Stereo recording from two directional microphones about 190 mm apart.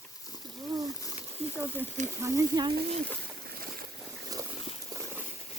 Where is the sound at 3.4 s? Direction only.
55° right (ahead or behind).